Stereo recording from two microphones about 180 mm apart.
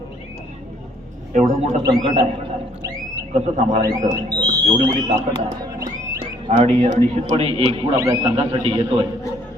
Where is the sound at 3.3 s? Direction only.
40° right (ahead or behind).